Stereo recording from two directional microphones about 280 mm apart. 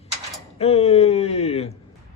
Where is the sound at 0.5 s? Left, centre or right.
Left.